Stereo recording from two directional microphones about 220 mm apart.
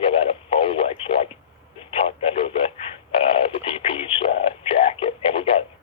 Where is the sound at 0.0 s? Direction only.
25° left (ahead or behind).